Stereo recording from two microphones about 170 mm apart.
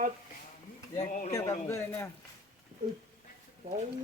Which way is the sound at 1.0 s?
50° left (ahead or behind).